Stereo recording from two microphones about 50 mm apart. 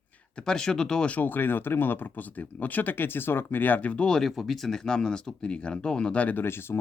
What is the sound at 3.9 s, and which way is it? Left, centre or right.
Speech, left.